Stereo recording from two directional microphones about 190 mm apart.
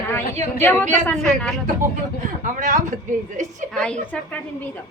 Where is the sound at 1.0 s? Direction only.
5° left (ahead or behind).